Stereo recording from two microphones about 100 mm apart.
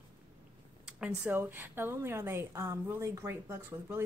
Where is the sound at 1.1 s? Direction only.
20° right (ahead or behind).